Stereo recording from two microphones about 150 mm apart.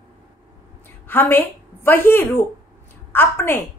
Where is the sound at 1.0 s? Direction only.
15° left (ahead or behind).